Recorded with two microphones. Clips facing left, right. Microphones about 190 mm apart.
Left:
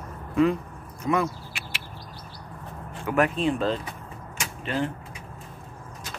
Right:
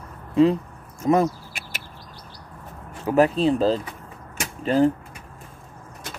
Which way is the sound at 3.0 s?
35° right (ahead or behind).